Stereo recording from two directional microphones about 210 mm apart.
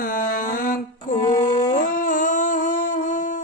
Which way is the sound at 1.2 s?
30° left (ahead or behind).